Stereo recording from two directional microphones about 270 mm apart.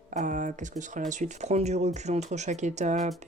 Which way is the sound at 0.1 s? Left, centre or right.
Right.